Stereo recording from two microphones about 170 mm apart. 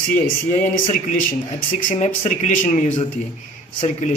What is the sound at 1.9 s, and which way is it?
Speech, 45° left (ahead or behind).